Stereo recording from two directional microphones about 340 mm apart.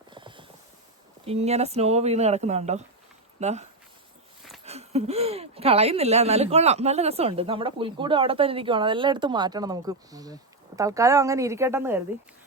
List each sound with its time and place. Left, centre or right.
0.1 s clip-clop: centre
1.2 s speech: centre